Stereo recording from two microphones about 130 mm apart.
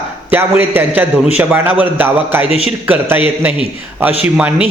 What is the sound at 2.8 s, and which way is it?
A man's voice, 15° right (ahead or behind).